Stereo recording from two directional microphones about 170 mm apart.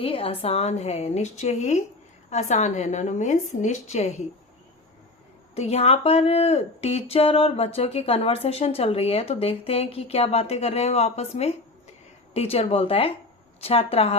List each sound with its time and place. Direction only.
0.0 s a woman's voice: 35° left (ahead or behind)
5.5 s speech: 40° left (ahead or behind)